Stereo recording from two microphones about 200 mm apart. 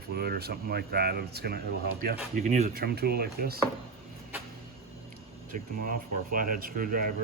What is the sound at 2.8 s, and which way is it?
Speech, 50° right (ahead or behind).